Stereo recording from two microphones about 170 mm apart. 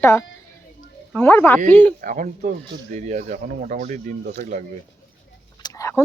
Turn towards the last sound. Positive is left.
turn(degrees=20)  # may be behind; listen again after turning